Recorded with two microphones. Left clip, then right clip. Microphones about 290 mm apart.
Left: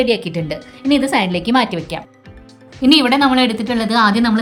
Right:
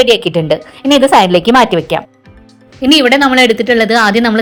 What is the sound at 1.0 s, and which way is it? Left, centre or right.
Speech, right.